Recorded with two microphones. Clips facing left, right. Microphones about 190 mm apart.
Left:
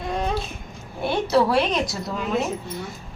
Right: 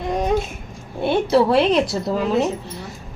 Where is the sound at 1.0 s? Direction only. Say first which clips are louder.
Right 4 dB; 25° right (ahead or behind).